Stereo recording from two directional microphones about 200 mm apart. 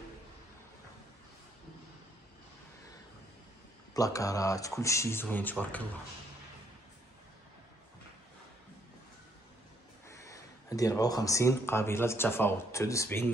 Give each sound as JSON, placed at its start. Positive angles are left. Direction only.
{"t": 3.9, "sound": "speech", "side_deg": 15}
{"t": 10.0, "sound": "speech", "side_deg": 15}